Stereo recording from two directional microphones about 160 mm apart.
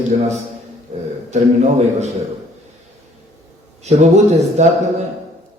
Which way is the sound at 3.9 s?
45° right (ahead or behind).